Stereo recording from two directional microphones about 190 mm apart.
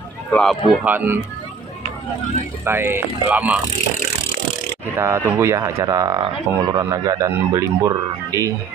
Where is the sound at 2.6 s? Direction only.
10° right (ahead or behind).